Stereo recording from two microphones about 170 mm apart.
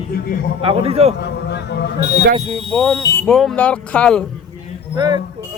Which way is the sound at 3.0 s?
20° left (ahead or behind).